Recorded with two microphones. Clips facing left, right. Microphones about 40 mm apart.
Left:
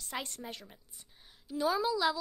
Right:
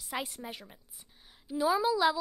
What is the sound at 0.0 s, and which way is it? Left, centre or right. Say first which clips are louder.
A woman's voice: right 3 dB; centre.